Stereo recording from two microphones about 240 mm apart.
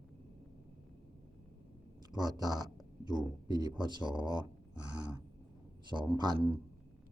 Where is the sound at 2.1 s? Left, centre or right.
Centre.